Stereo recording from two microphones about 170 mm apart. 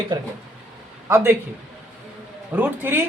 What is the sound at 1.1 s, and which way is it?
Speech, 15° right (ahead or behind).